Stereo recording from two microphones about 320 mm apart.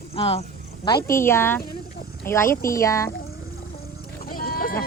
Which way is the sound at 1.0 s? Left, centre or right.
Centre.